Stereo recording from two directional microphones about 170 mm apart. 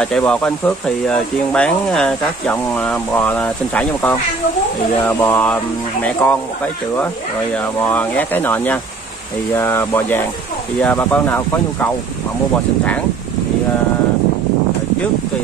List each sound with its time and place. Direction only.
0.0 s speech: 5° left (ahead or behind)
7.5 s speech: 10° left (ahead or behind)